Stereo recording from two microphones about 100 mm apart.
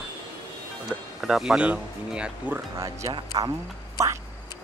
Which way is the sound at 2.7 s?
30° right (ahead or behind).